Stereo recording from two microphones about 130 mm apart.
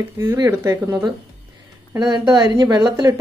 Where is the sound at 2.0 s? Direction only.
35° right (ahead or behind).